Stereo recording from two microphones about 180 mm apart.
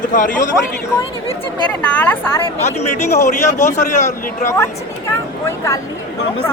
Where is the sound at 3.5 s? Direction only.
15° left (ahead or behind).